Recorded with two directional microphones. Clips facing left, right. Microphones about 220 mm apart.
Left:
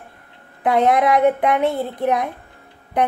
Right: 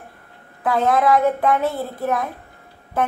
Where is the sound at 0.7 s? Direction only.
20° left (ahead or behind).